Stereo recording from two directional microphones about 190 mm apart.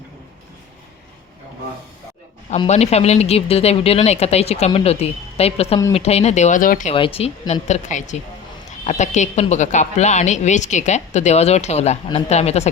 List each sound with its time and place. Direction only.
2.6 s a woman's voice: 35° left (ahead or behind)
6.9 s a woman's voice: 30° left (ahead or behind)